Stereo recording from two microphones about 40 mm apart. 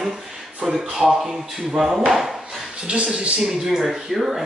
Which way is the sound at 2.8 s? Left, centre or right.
Right.